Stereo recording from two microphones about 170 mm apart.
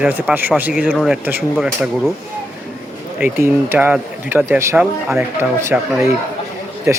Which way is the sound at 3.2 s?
10° right (ahead or behind).